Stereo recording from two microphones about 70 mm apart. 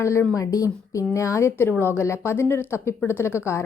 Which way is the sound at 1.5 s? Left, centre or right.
Left.